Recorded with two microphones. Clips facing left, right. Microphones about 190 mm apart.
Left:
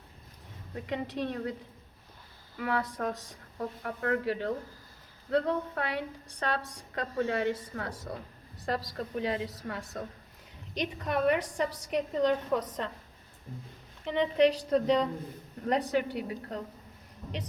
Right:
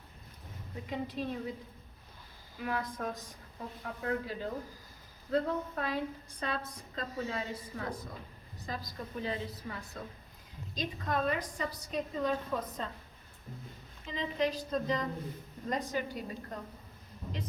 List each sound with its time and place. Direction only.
0.9 s a woman's voice: 70° left (ahead or behind)
2.6 s a woman's voice: 70° left (ahead or behind)
14.0 s a woman's voice: 70° left (ahead or behind)